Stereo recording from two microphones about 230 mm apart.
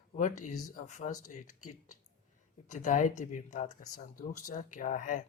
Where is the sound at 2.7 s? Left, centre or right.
Left.